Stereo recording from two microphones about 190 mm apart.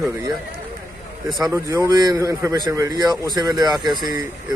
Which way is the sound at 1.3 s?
20° right (ahead or behind).